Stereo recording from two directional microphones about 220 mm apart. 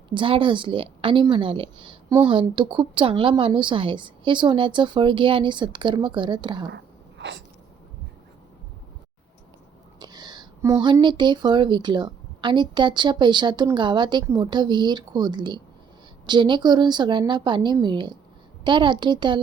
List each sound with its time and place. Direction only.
0.1 s a woman's voice: 25° right (ahead or behind)
7.2 s sneeze: 55° right (ahead or behind)
10.0 s a sound: 20° right (ahead or behind)
11.2 s a woman's voice: 20° right (ahead or behind)